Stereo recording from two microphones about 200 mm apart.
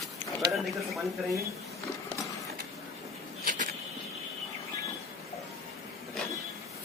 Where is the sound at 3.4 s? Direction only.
40° right (ahead or behind).